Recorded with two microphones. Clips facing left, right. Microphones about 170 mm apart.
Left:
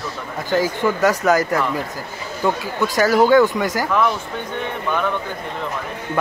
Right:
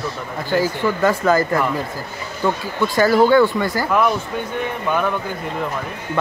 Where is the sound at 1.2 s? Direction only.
10° left (ahead or behind).